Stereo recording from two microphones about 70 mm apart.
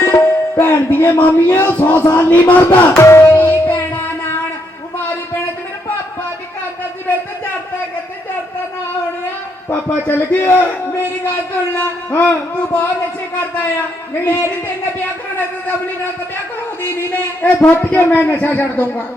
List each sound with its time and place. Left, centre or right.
0.0 s music: left
2.9 s music: left
9.6 s a man's voice: left
14.3 s speech: left
16.9 s a man's voice: left